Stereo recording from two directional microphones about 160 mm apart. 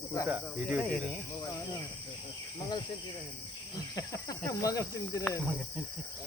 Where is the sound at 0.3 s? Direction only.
10° right (ahead or behind).